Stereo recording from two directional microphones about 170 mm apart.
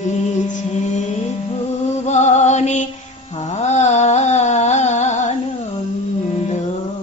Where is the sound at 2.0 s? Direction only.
40° left (ahead or behind).